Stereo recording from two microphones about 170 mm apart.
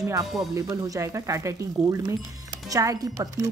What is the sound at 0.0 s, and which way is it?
Speech, 20° right (ahead or behind).